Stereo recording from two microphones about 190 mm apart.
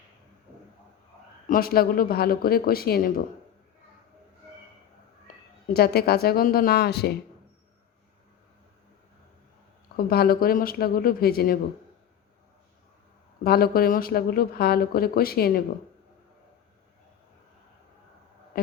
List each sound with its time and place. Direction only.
1.5 s speech: 50° left (ahead or behind)
5.6 s speech: 55° left (ahead or behind)
10.1 s speech: 55° left (ahead or behind)
13.4 s speech: 55° left (ahead or behind)
18.5 s a sound: 50° left (ahead or behind)